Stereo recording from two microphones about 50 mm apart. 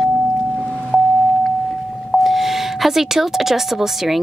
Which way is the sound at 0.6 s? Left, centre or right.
Left.